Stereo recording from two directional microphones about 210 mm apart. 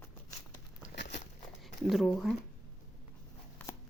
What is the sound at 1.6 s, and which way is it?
Speech, centre (ahead or behind).